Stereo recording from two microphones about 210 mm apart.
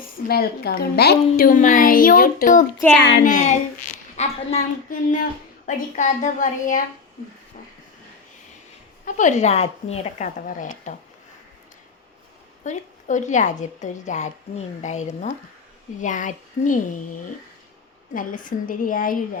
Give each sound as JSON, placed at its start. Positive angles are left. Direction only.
{"t": 0.3, "sound": "a woman's voice", "side_deg": 45}
{"t": 3.0, "sound": "a child's voice", "side_deg": 55}
{"t": 3.2, "sound": "a woman's voice", "side_deg": 35}
{"t": 9.0, "sound": "a woman's voice", "side_deg": 35}
{"t": 12.6, "sound": "a woman's voice", "side_deg": 35}
{"t": 18.1, "sound": "a woman's voice", "side_deg": 40}